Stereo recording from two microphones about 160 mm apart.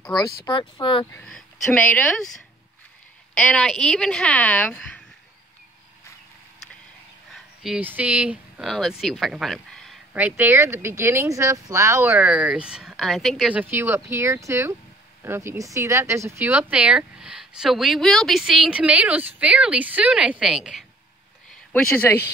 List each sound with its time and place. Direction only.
0.5 s speech: 30° left (ahead or behind)
1.1 s speech: 5° left (ahead or behind)
3.3 s speech: 5° left (ahead or behind)
7.3 s speech: 5° right (ahead or behind)
10.1 s speech: 10° right (ahead or behind)
21.5 s a sound: 5° left (ahead or behind)